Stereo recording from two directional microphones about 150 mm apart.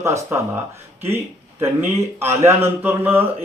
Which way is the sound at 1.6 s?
15° right (ahead or behind).